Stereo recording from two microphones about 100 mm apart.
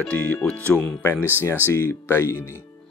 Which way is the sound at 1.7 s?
25° left (ahead or behind).